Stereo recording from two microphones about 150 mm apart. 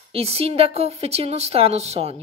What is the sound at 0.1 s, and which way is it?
A woman's voice, 40° right (ahead or behind).